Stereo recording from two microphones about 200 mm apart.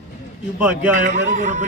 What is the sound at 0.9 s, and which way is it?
Speech, 35° right (ahead or behind).